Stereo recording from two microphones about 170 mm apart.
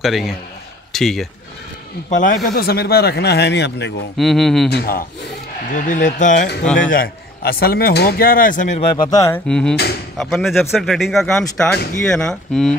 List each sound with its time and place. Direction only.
0.0 s speech: centre (ahead or behind)
2.0 s speech: 50° left (ahead or behind)
2.5 s speech: 65° left (ahead or behind); by 3.9 s 90° left
4.2 s speech: centre (ahead or behind)
4.6 s speech: 65° left (ahead or behind)
5.7 s speech: 50° left (ahead or behind)
6.9 s speech: 60° left (ahead or behind)
8.9 s speech: 25° left (ahead or behind)
9.5 s speech: 5° left (ahead or behind)